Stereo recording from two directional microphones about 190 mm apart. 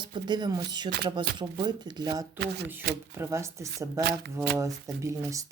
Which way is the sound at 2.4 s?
60° right (ahead or behind).